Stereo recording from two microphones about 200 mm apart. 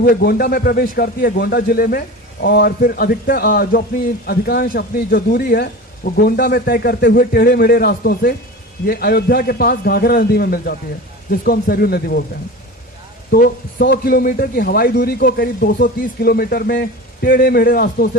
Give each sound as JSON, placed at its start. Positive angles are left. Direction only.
{"t": 0.0, "sound": "a man's voice", "side_deg": 50}
{"t": 13.3, "sound": "a man's voice", "side_deg": 45}